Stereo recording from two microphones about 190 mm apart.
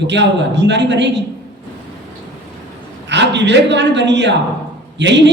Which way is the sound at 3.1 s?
65° right (ahead or behind).